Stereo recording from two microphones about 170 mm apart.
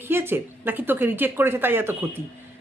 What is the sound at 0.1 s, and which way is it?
A woman's voice, 15° right (ahead or behind).